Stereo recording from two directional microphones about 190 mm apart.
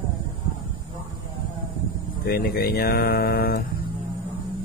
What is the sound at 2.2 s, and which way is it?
Speech, 55° left (ahead or behind).